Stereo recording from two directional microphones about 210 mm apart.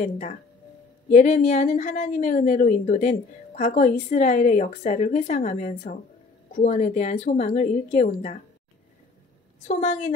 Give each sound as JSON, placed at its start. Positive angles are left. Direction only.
{"t": 0.0, "sound": "a woman's voice", "side_deg": 35}
{"t": 9.7, "sound": "a woman's voice", "side_deg": 35}